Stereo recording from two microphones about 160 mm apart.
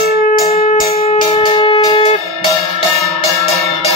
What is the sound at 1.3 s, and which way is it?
Shofar, 30° left (ahead or behind).